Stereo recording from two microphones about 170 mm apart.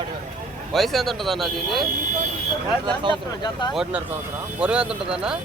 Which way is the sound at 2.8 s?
30° right (ahead or behind).